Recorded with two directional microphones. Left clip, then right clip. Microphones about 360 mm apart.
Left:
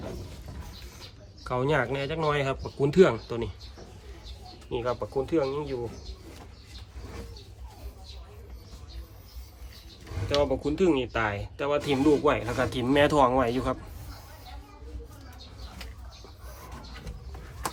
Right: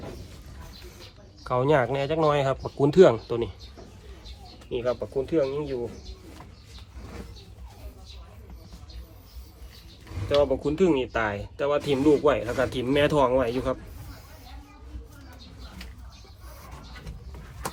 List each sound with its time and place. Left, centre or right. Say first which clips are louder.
1.5 s speech: right 4 dB; centre
4.7 s speech: right 2 dB; centre
10.2 s speech: right 3 dB; centre